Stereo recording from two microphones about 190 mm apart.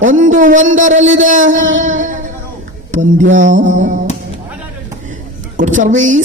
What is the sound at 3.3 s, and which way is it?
Music, 40° right (ahead or behind).